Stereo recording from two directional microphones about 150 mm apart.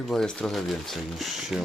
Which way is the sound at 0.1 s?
5° left (ahead or behind).